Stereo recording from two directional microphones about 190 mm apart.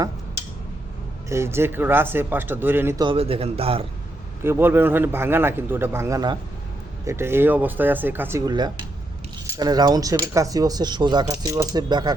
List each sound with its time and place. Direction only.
1.3 s speech: 15° right (ahead or behind); by 3.8 s 30° right (ahead or behind)
4.4 s speech: 10° right (ahead or behind)